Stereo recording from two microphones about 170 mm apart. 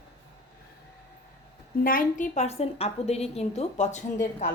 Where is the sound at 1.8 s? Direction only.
55° left (ahead or behind).